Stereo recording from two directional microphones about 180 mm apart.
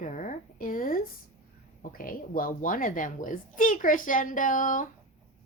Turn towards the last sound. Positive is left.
turn(degrees=45)  # may be behind; listen again after turning